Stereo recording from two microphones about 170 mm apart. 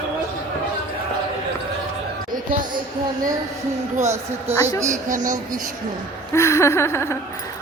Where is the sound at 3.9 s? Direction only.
45° right (ahead or behind).